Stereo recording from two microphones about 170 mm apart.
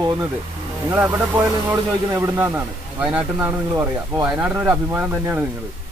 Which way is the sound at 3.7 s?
20° right (ahead or behind).